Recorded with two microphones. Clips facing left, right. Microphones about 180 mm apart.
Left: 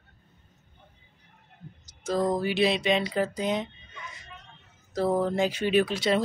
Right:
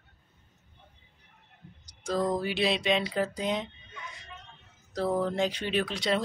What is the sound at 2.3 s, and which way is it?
Speech, centre (ahead or behind).